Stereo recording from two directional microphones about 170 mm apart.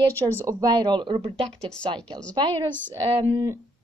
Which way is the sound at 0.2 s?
15° right (ahead or behind).